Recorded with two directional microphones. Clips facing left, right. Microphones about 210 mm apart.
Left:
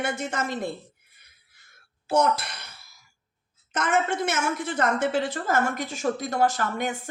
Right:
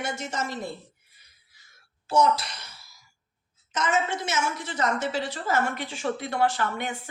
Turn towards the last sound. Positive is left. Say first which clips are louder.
# left 2 dB
turn(degrees=45)  # may be behind; listen again after turning